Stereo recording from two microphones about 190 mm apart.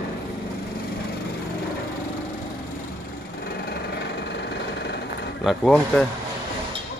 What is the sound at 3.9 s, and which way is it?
Engine, 65° left (ahead or behind).